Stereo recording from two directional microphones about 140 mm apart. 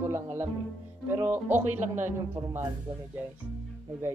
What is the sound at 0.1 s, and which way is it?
Speech, 15° right (ahead or behind).